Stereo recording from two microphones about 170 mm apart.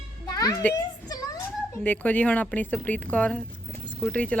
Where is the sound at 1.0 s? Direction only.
20° left (ahead or behind).